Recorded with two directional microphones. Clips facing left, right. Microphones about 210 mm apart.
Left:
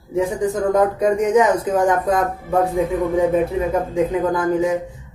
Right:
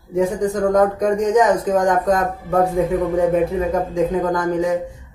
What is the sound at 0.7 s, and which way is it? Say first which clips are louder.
Speech: even; 5° left (ahead or behind).